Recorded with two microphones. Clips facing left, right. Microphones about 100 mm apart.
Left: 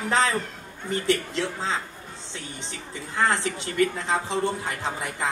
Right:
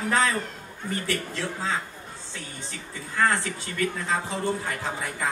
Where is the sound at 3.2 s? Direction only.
20° left (ahead or behind).